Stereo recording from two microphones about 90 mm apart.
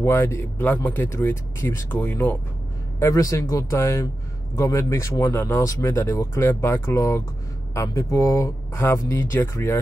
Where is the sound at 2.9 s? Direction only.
35° left (ahead or behind).